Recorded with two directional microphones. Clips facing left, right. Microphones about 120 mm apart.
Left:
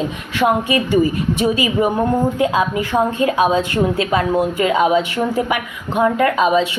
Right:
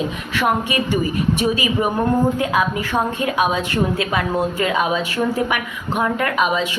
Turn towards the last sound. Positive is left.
turn(degrees=30)  # may be behind; listen again after turning